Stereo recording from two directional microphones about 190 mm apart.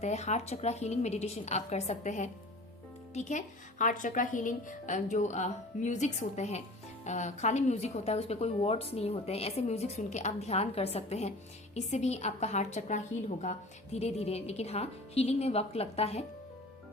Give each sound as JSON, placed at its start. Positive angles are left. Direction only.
{"t": 0.0, "sound": "speech", "side_deg": 35}